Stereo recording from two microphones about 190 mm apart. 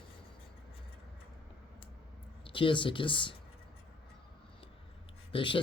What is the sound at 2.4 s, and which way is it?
Speech, 25° left (ahead or behind).